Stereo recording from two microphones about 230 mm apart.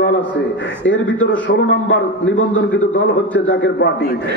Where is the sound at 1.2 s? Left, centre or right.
Left.